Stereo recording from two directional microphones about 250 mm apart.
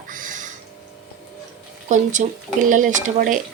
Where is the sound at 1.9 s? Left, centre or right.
Right.